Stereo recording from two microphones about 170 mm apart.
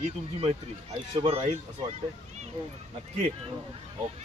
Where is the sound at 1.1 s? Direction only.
35° right (ahead or behind).